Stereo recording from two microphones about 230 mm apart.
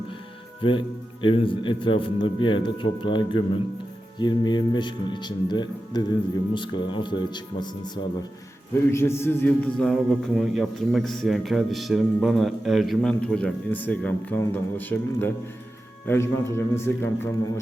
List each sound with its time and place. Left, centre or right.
0.6 s speech: left
8.9 s a man's voice: centre